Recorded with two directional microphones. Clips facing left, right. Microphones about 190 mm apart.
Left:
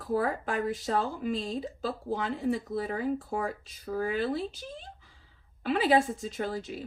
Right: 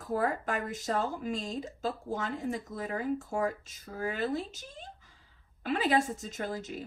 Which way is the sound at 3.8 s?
45° left (ahead or behind).